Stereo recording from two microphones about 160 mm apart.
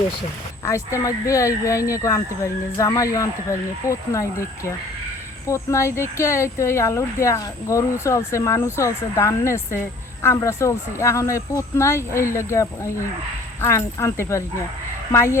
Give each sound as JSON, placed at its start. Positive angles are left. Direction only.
{"t": 0.6, "sound": "speech", "side_deg": 20}